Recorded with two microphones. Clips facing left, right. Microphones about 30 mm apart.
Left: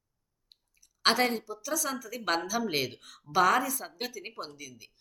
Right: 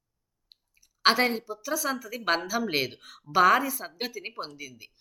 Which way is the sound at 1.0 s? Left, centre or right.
Centre.